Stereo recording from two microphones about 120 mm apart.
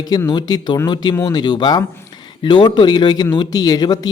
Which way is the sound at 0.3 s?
35° left (ahead or behind).